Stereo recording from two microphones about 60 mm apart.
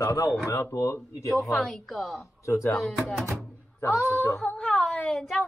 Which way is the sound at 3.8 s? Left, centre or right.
Left.